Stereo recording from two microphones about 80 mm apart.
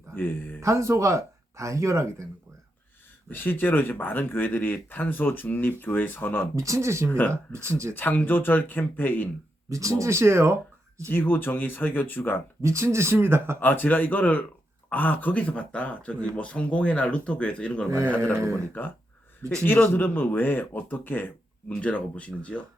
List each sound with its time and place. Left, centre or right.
0.2 s speech: left
0.6 s speech: right
3.2 s speech: left
6.6 s speech: right
7.1 s speech: left
7.6 s speech: right
7.9 s speech: left
9.6 s speech: right
11.1 s speech: left
12.6 s speech: right
13.6 s speech: left
18.3 s speech: right
18.7 s speech: left